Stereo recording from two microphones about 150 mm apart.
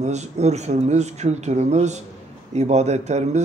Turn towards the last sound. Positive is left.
turn(degrees=-50)  # may be behind; listen again after turning